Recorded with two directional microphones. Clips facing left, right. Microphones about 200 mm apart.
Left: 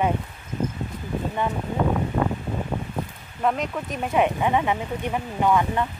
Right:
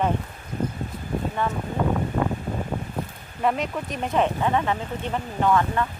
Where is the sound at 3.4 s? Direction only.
Centre (ahead or behind).